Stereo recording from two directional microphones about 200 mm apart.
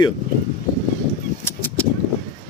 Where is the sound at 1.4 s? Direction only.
10° left (ahead or behind).